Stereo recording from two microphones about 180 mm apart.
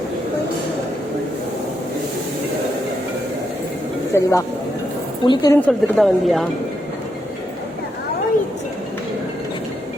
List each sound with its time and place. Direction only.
4.1 s a woman's voice: 15° left (ahead or behind)
5.6 s speech: centre (ahead or behind)